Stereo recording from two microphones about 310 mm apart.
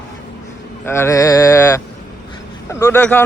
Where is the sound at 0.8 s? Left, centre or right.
Centre.